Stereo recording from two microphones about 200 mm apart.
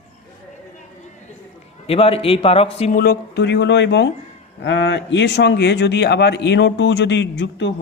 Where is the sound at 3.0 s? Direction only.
55° left (ahead or behind).